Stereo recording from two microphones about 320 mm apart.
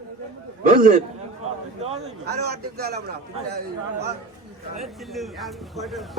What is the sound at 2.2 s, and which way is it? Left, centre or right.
A man's voice, right.